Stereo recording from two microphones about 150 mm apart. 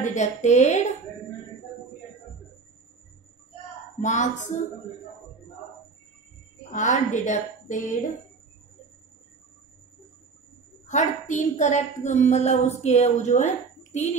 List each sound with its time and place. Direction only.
0.0 s a woman's voice: 50° left (ahead or behind)
4.0 s a woman's voice: 55° left (ahead or behind)
6.7 s a woman's voice: 55° left (ahead or behind)
10.9 s a woman's voice: 55° left (ahead or behind)